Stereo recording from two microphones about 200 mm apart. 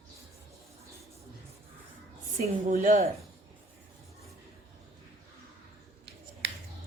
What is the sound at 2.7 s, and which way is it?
Speech, 40° right (ahead or behind).